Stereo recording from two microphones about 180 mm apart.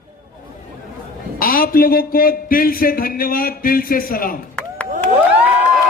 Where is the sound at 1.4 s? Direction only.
50° left (ahead or behind).